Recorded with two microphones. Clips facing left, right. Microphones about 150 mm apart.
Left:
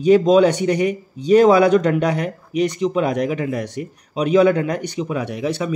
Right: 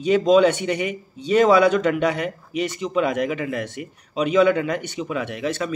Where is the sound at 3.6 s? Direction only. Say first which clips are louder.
Left 5 dB; 10° left (ahead or behind).